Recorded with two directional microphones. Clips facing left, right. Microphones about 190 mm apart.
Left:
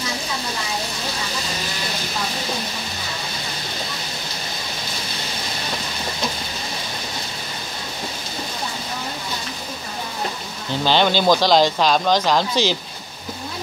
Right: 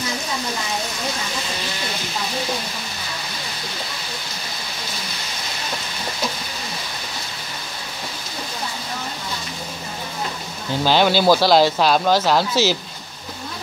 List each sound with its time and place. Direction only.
10.8 s speech: 10° right (ahead or behind)